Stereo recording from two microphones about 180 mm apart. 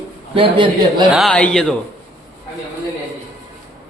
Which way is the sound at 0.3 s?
30° right (ahead or behind).